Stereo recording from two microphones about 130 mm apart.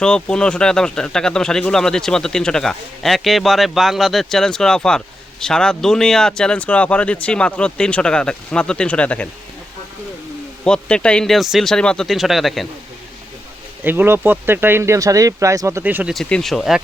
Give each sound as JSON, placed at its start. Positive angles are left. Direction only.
{"t": 0.0, "sound": "speech", "side_deg": 5}
{"t": 10.6, "sound": "speech", "side_deg": 5}
{"t": 13.8, "sound": "speech", "side_deg": -15}
{"t": 16.1, "sound": "speech", "side_deg": 0}